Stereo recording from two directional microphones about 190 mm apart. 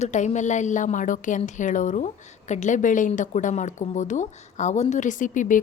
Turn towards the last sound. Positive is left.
turn(degrees=45)  # may be behind; listen again after turning